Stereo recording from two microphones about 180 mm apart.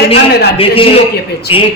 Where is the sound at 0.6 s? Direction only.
30° left (ahead or behind).